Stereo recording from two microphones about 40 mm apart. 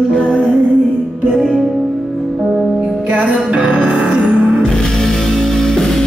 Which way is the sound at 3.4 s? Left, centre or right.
Right.